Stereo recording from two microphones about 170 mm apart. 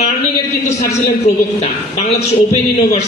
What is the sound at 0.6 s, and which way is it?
Speech, 40° left (ahead or behind).